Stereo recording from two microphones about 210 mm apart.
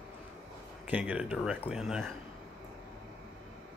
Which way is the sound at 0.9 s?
5° right (ahead or behind).